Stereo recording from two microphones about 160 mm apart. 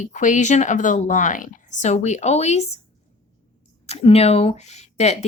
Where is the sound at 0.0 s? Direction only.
55° left (ahead or behind).